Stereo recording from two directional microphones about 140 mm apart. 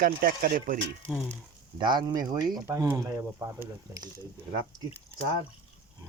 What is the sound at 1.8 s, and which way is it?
Speech, 30° right (ahead or behind).